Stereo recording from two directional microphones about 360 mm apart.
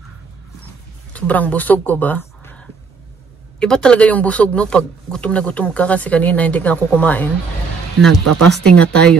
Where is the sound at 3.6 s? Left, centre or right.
Centre.